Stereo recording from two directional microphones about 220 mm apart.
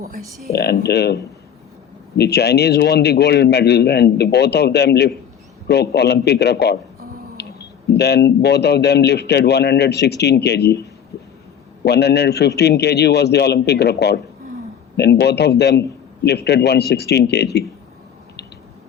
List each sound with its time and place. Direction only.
0.5 s a man's voice: 45° left (ahead or behind)
7.4 s a sound: 50° left (ahead or behind)
7.9 s a man's voice: 50° left (ahead or behind)
11.9 s a man's voice: 50° left (ahead or behind)